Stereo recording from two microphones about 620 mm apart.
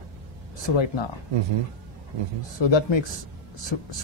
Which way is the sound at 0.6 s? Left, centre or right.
Left.